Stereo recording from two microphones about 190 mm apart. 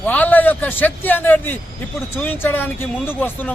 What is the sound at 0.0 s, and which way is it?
A man's voice, 10° left (ahead or behind).